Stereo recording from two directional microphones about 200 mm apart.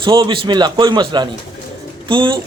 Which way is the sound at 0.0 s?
25° right (ahead or behind).